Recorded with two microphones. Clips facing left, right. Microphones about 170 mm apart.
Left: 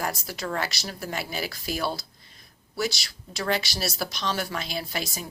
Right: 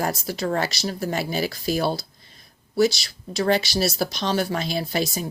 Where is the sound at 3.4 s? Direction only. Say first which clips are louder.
Right 7 dB; 35° right (ahead or behind).